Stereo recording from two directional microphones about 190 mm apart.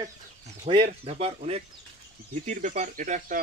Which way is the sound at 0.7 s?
30° right (ahead or behind).